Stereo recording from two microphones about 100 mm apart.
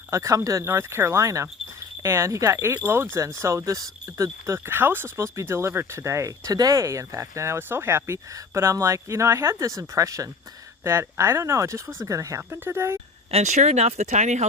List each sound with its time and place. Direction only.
0.1 s speech: 30° right (ahead or behind)
13.3 s speech: 90° right